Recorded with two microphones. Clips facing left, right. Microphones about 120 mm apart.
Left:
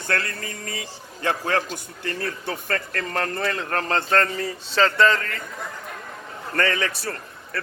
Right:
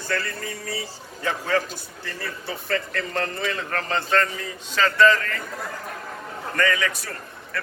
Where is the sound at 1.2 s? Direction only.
55° left (ahead or behind).